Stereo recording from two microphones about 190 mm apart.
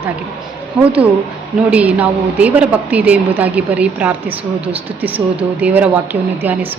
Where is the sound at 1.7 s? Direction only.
5° right (ahead or behind).